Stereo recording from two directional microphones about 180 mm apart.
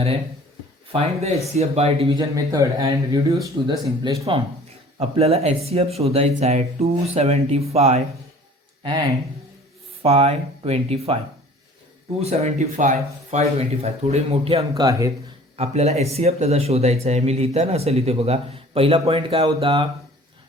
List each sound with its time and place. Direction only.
0.9 s speech: 35° right (ahead or behind)
2.1 s speech: 20° right (ahead or behind)
4.9 s speech: 35° right (ahead or behind)
10.0 s speech: 35° right (ahead or behind)
12.2 s speech: 35° right (ahead or behind)
14.8 s speech: 15° right (ahead or behind)
15.5 s speech: 35° right (ahead or behind)